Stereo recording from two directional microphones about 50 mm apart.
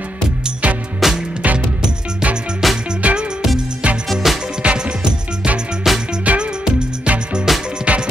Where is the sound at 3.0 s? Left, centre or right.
Right.